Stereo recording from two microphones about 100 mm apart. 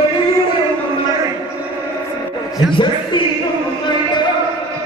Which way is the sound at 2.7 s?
55° left (ahead or behind).